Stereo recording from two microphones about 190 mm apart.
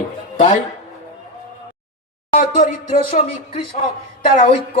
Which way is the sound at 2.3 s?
50° left (ahead or behind).